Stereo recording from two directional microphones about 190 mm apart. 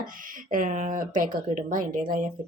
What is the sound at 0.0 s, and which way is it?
Speech, 45° right (ahead or behind).